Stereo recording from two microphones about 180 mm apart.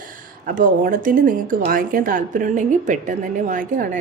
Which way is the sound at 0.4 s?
50° right (ahead or behind).